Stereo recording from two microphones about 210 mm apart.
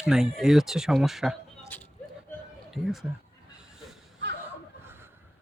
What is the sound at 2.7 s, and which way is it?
Speech, centre (ahead or behind).